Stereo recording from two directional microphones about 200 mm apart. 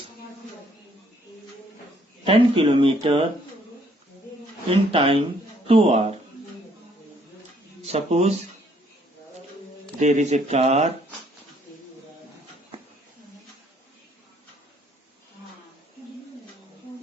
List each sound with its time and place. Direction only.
2.2 s speech: 25° right (ahead or behind)
4.7 s speech: 25° right (ahead or behind)
7.9 s speech: 30° right (ahead or behind)
10.0 s speech: 35° right (ahead or behind)